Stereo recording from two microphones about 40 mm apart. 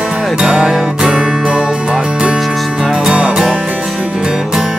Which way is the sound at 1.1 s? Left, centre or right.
Right.